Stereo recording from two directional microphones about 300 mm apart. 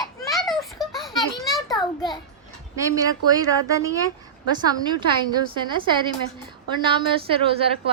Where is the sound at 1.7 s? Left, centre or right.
Centre.